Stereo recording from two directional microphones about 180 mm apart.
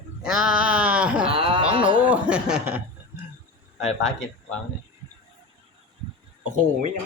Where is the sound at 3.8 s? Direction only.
5° left (ahead or behind).